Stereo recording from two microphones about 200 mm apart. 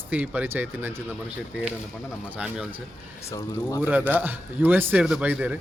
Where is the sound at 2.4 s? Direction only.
5° right (ahead or behind).